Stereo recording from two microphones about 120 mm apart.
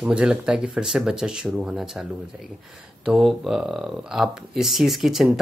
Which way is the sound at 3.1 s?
Centre (ahead or behind).